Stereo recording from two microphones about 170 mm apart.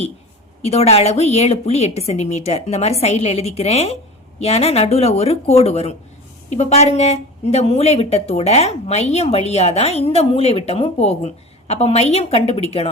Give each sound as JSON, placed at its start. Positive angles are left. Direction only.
{"t": 0.6, "sound": "a woman's voice", "side_deg": 40}